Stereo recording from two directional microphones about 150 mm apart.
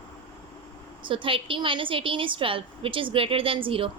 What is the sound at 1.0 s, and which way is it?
A woman's voice, 35° right (ahead or behind).